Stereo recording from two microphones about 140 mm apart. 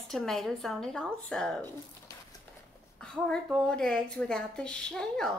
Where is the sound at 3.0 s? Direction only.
5° left (ahead or behind).